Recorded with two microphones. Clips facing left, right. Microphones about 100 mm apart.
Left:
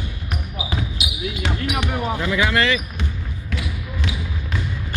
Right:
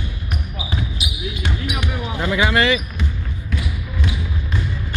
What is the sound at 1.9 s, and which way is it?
Basketball bounce, 40° left (ahead or behind).